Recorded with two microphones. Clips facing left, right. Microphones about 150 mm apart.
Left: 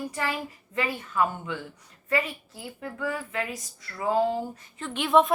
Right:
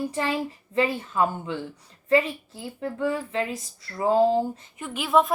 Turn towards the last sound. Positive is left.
turn(degrees=0)  # may be behind; listen again after turning